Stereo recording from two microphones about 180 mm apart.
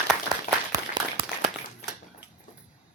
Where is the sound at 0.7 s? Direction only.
25° right (ahead or behind).